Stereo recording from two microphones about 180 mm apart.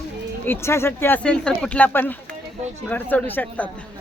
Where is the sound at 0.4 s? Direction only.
15° left (ahead or behind).